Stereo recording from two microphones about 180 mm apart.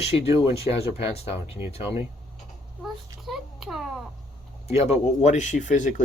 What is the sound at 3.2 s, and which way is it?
Speech, centre (ahead or behind).